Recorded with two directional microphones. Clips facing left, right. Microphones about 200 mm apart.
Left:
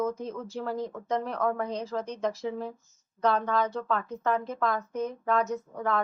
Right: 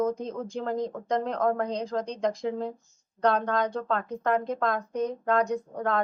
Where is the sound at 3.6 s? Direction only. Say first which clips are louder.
Right 1 dB; 15° right (ahead or behind).